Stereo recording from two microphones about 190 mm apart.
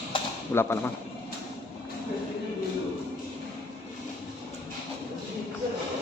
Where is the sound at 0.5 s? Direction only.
10° left (ahead or behind).